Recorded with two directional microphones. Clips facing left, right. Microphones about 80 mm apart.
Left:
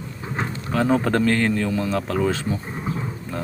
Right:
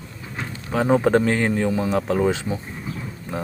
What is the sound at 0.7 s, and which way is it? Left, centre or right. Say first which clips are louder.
Speech: right 3 dB; centre.